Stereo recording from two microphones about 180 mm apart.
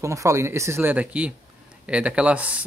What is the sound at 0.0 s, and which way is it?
Speech, 15° right (ahead or behind).